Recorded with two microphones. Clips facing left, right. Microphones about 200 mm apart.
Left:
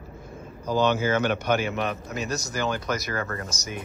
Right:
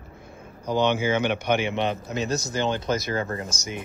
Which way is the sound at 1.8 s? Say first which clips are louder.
Right 3 dB; 25° right (ahead or behind).